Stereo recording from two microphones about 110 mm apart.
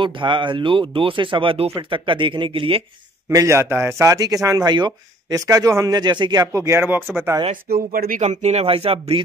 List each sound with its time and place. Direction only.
0.0 s speech: 45° right (ahead or behind)
3.3 s speech: 25° right (ahead or behind)
6.5 s speech: 25° right (ahead or behind)
8.2 s speech: 90° right; by 9.2 s 60° right (ahead or behind)